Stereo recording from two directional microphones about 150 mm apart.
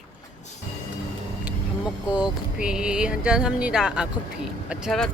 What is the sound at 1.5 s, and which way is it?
Speech, 5° right (ahead or behind).